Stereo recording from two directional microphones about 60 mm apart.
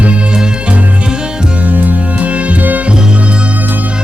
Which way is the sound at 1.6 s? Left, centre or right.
Right.